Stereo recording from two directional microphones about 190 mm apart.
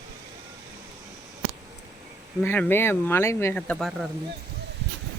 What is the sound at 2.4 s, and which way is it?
Speech, 10° left (ahead or behind).